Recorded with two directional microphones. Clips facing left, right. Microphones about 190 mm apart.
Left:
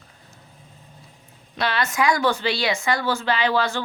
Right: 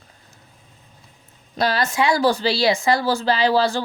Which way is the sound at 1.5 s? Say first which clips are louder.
Right 3 dB; 40° right (ahead or behind).